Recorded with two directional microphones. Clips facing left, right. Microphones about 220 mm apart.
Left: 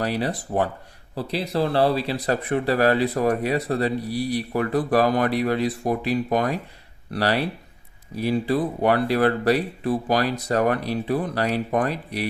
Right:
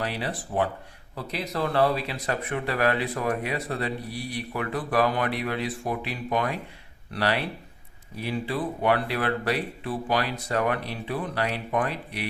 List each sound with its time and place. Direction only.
0.0 s speech: 40° left (ahead or behind)